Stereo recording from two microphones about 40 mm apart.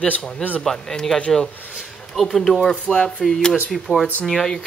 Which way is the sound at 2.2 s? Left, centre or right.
Centre.